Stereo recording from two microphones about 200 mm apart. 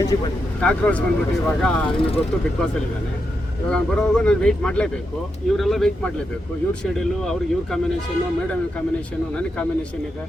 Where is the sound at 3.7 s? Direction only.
5° left (ahead or behind).